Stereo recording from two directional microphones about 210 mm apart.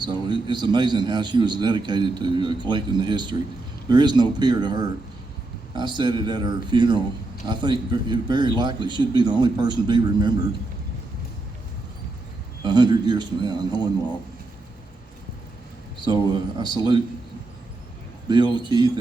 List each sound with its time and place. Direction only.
0.0 s a man's voice: 20° right (ahead or behind)
12.6 s a man's voice: 20° right (ahead or behind)
16.0 s a man's voice: 20° right (ahead or behind)
18.3 s a man's voice: 20° right (ahead or behind)